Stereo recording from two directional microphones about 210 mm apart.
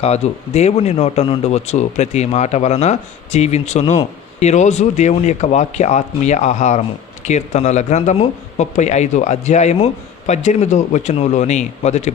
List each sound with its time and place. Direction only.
0.0 s speech: 30° left (ahead or behind)